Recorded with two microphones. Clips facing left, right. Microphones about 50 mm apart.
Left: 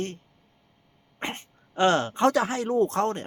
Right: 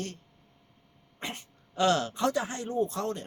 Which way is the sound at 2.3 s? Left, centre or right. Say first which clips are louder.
Left 7 dB; left.